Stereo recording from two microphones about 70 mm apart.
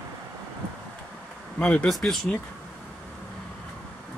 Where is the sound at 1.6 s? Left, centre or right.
Centre.